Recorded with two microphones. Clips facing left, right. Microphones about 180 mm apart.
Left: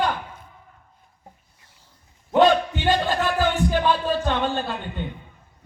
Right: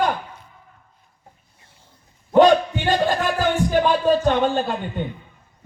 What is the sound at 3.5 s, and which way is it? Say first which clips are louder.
Music: right 3 dB; 45° right (ahead or behind).